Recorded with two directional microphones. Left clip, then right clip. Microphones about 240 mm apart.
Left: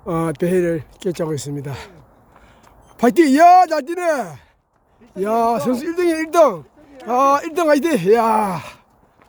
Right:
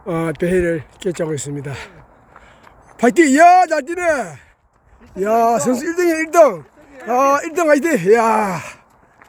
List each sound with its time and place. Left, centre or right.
0.0 s speech: centre
3.0 s speech: centre